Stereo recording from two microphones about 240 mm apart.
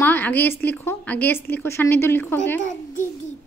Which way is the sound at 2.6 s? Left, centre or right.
Left.